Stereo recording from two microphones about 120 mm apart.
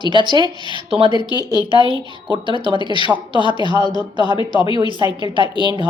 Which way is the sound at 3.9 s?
40° left (ahead or behind).